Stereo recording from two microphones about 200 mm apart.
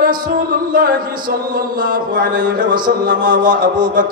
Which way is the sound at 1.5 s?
45° right (ahead or behind).